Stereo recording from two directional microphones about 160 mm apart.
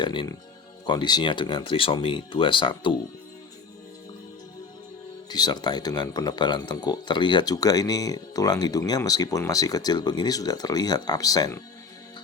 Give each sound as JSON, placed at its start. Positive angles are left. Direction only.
{"t": 0.0, "sound": "speech", "side_deg": 30}
{"t": 5.3, "sound": "speech", "side_deg": 25}